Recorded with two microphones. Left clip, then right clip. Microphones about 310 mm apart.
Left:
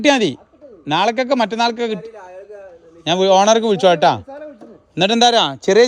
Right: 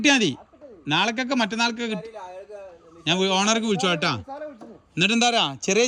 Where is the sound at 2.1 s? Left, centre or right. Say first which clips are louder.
Left 2 dB; centre.